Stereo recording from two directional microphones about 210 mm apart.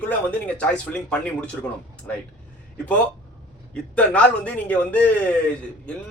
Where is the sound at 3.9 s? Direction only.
5° left (ahead or behind).